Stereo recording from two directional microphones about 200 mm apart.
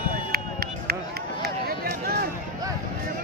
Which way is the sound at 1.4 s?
50° right (ahead or behind).